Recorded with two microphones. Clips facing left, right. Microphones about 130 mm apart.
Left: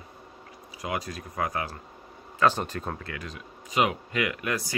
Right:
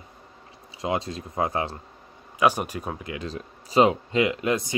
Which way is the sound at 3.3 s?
30° right (ahead or behind).